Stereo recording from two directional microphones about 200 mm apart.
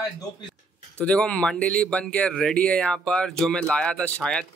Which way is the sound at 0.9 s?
5° left (ahead or behind).